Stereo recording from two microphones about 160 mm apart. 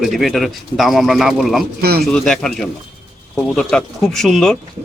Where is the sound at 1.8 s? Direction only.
75° right (ahead or behind).